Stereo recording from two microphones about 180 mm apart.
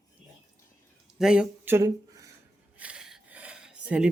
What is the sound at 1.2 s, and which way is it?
Speech, 5° right (ahead or behind).